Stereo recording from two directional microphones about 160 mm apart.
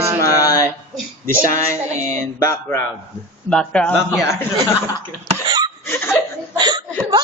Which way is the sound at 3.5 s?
5° left (ahead or behind).